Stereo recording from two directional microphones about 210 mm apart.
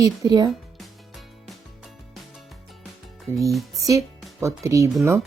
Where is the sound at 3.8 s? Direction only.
15° right (ahead or behind).